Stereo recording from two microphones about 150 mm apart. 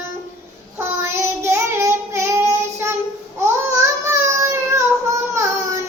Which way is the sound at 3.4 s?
20° right (ahead or behind).